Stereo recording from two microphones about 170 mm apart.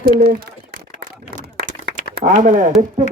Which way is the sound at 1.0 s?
55° right (ahead or behind).